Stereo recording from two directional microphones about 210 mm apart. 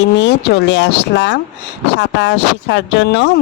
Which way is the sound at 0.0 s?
55° left (ahead or behind).